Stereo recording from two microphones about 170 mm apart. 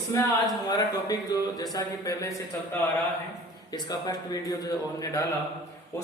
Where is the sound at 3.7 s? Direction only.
20° left (ahead or behind).